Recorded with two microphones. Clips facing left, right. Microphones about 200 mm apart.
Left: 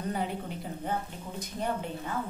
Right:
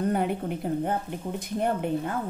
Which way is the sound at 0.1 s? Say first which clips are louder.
Right 7 dB; 55° right (ahead or behind).